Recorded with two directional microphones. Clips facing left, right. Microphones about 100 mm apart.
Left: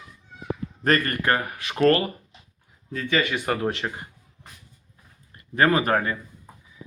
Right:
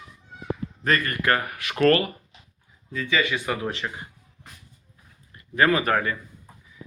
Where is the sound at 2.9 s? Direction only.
50° left (ahead or behind).